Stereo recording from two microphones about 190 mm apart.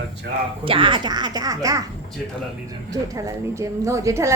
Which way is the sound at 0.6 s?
25° right (ahead or behind).